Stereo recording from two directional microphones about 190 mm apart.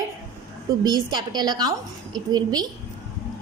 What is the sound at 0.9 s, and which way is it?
A woman's voice, 20° right (ahead or behind).